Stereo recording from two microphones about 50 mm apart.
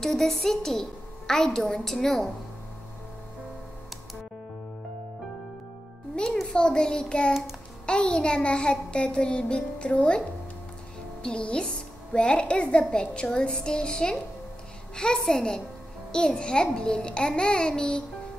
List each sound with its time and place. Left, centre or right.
0.0 s a woman's voice: centre
6.5 s a woman's voice: centre
7.8 s child singing: centre
11.2 s a woman's voice: centre